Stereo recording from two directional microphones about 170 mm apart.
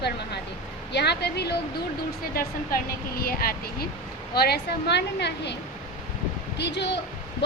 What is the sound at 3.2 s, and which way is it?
A woman's voice, 60° left (ahead or behind).